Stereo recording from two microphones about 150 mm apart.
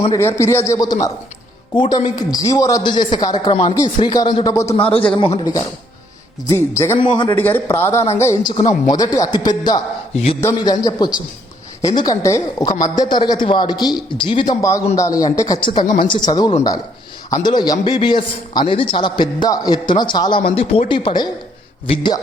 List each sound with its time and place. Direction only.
0.1 s speech: 15° left (ahead or behind)
4.8 s speech: 40° left (ahead or behind)
6.5 s speech: 20° left (ahead or behind)
6.9 s speech: 35° left (ahead or behind)
7.3 s a man's voice: 15° left (ahead or behind); by 14.5 s 35° left (ahead or behind)
14.6 s speech: 20° left (ahead or behind)
20.4 s speech: 40° left (ahead or behind)